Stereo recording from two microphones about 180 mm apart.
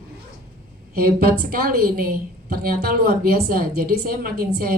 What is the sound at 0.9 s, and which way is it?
A woman's voice, 55° right (ahead or behind).